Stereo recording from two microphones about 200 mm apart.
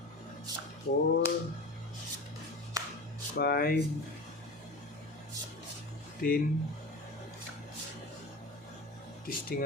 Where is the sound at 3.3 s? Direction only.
50° left (ahead or behind).